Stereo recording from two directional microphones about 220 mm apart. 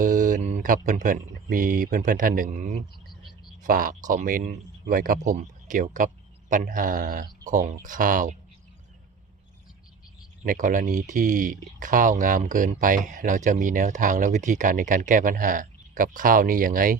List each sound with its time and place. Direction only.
0.0 s speech: 35° right (ahead or behind)
10.4 s speech: 40° right (ahead or behind)